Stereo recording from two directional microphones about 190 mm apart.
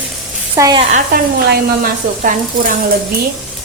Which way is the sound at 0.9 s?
50° right (ahead or behind).